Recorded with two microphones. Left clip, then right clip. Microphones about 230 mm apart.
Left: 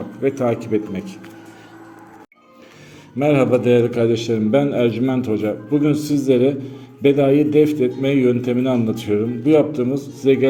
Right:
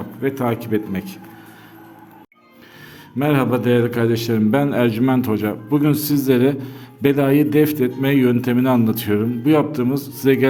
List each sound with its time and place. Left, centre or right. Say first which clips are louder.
0.2 s a man's voice: left 2 dB; centre
3.2 s a man's voice: left 3 dB; centre